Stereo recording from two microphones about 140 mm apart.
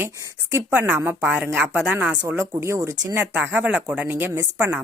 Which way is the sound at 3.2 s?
5° right (ahead or behind).